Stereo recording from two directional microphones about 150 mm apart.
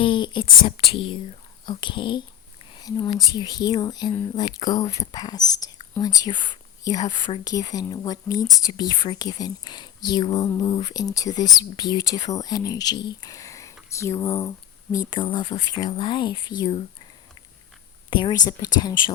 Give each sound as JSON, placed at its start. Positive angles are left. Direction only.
{"t": 0.0, "sound": "speech", "side_deg": 30}
{"t": 18.1, "sound": "speech", "side_deg": 30}